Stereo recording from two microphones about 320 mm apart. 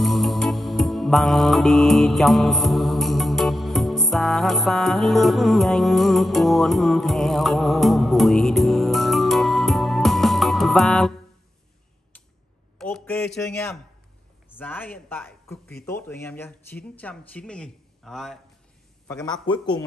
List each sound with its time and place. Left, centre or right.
0.0 s music: centre
12.7 s a sound: centre
14.5 s speech: centre